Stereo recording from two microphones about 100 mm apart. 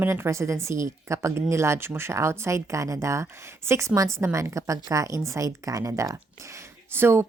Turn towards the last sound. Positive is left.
turn(degrees=-25)  # may be behind; listen again after turning